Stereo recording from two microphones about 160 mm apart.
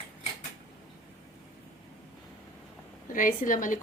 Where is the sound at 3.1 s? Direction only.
55° left (ahead or behind).